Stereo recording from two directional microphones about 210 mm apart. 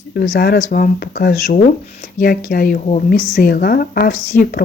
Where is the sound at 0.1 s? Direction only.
50° left (ahead or behind).